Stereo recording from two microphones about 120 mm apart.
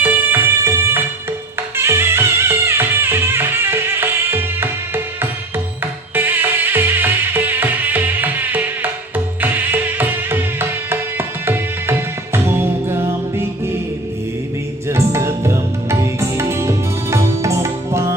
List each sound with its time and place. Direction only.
0.0 s music: 15° right (ahead or behind)
5.8 s music: 15° right (ahead or behind)
14.8 s music: 25° right (ahead or behind)